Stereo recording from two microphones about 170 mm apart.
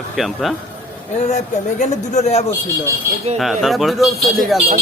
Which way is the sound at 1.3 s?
45° left (ahead or behind).